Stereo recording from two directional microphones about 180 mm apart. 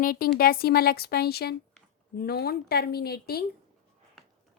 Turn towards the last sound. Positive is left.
turn(degrees=60)  # may be behind; listen again after turning